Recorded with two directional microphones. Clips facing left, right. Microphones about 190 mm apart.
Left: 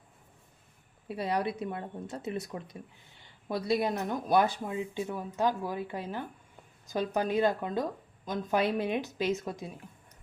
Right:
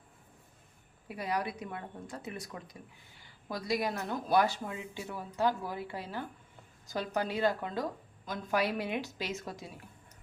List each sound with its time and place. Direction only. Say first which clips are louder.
1.0 s a woman's voice: left 4 dB; 25° left (ahead or behind)